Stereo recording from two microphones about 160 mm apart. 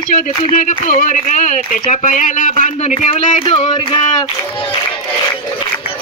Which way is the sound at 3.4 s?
30° left (ahead or behind).